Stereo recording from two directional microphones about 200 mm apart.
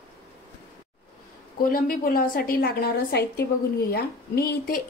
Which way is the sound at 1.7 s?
45° left (ahead or behind).